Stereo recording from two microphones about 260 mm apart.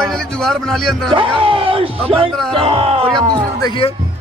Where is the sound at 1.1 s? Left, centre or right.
Centre.